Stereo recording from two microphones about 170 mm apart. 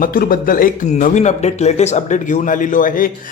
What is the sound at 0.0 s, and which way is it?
A man's voice, 55° left (ahead or behind).